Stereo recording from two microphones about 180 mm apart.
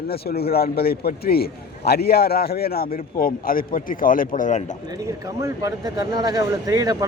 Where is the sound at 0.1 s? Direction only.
60° left (ahead or behind); by 4.6 s 45° left (ahead or behind).